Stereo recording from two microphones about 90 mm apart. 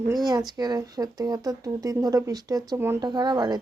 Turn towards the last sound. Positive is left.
turn(degrees=-50)  # may be behind; listen again after turning